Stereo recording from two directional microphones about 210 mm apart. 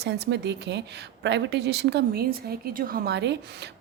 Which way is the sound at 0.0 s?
55° right (ahead or behind).